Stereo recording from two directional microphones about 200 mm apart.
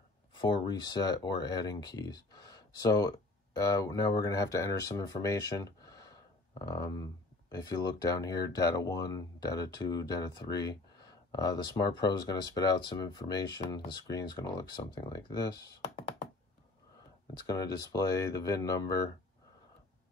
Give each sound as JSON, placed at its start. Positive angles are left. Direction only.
{"t": 0.4, "sound": "speech", "side_deg": 20}
{"t": 17.3, "sound": "speech", "side_deg": 20}